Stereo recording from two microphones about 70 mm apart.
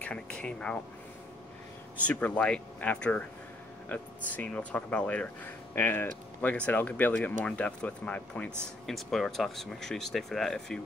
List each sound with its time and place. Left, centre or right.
0.0 s a sound: centre
2.0 s speech: centre
8.8 s speech: centre